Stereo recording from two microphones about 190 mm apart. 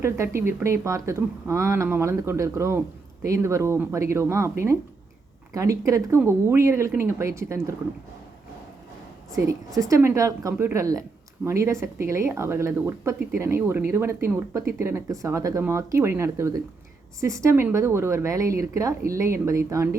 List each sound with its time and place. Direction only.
0.0 s speech: 15° right (ahead or behind)
9.3 s speech: 15° right (ahead or behind)